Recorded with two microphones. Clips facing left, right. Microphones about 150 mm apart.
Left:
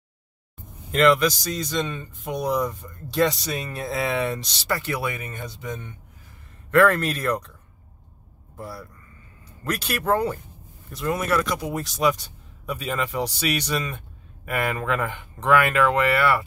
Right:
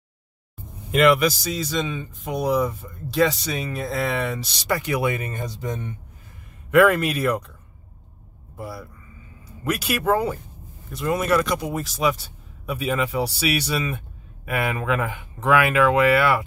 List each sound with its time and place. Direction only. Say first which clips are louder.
0.9 s speech: right 1 dB; 10° right (ahead or behind)
4.6 s a man's voice: right 6 dB; 15° right (ahead or behind)
5.2 s speech: right 4 dB; 35° right (ahead or behind)
6.7 s a man's voice: right 2 dB; 10° right (ahead or behind)
8.5 s a man's voice: right 2 dB; 10° right (ahead or behind)